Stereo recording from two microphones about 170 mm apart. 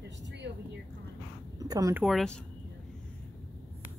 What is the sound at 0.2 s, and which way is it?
Vehicle, 90° right.